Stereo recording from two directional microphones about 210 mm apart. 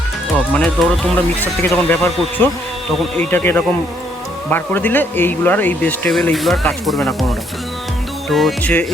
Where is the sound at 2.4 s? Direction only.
10° left (ahead or behind).